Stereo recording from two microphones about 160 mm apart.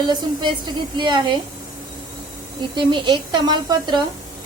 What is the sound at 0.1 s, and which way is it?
A woman's voice, 30° right (ahead or behind).